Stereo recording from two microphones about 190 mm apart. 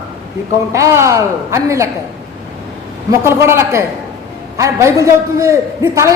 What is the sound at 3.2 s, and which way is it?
A man's voice, 15° right (ahead or behind).